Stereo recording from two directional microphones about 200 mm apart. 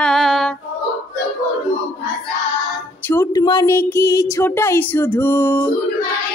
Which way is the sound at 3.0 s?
10° left (ahead or behind).